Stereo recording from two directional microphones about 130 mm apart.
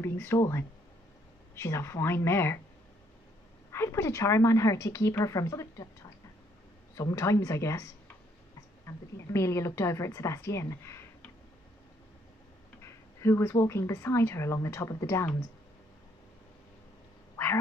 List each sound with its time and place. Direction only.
0.0 s speech: 20° left (ahead or behind)
3.7 s speech: 20° left (ahead or behind)
7.0 s speech: 25° left (ahead or behind)
12.8 s speech: 20° left (ahead or behind)